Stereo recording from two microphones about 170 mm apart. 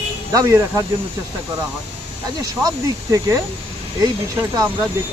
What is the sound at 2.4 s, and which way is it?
Speech, 20° right (ahead or behind).